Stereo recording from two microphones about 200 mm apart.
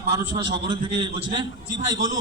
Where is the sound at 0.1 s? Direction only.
25° right (ahead or behind).